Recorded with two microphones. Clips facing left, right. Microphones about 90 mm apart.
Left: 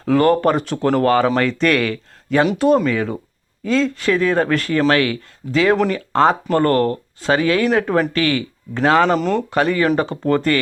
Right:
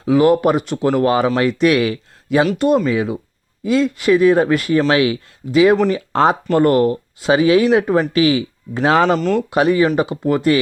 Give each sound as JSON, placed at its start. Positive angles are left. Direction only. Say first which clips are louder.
{"t": 0.0, "sound": "speech", "louder": "right 2 dB", "side_deg": -5}